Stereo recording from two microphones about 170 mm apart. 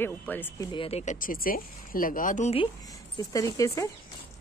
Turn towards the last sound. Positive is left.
turn(degrees=20)  # may be behind; listen again after turning